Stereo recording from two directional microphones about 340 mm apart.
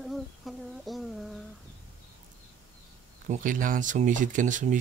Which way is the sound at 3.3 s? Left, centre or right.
Right.